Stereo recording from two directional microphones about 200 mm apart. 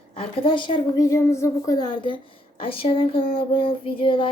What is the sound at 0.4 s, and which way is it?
A woman's voice, 25° left (ahead or behind).